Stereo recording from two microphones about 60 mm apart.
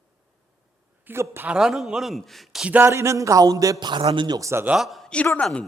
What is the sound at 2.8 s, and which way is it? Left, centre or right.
Speech, right.